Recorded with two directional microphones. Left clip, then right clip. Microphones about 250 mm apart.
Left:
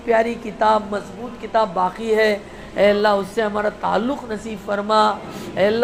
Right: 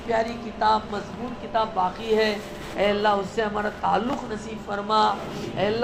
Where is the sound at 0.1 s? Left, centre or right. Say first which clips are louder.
Left 7 dB; left.